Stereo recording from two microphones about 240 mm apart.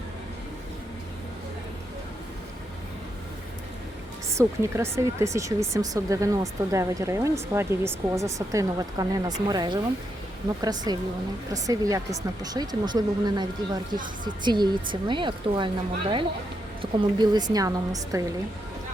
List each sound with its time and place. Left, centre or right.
4.3 s speech: centre